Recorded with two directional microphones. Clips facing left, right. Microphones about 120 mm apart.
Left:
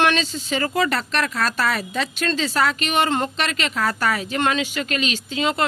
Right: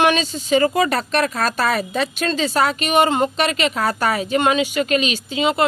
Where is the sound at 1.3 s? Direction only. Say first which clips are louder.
Right 2 dB; 40° right (ahead or behind).